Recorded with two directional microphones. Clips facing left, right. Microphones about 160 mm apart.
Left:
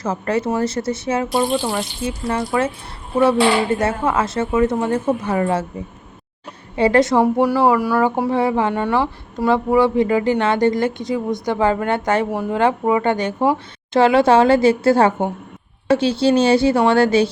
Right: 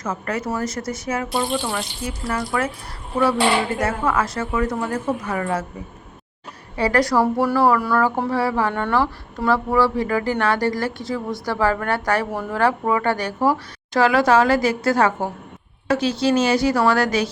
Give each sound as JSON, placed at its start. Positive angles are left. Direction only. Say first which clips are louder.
{"t": 0.0, "sound": "speech", "louder": "left 5 dB", "side_deg": 30}
{"t": 3.8, "sound": "speech", "louder": "left 2 dB", "side_deg": 25}
{"t": 6.7, "sound": "speech", "louder": "left 4 dB", "side_deg": 25}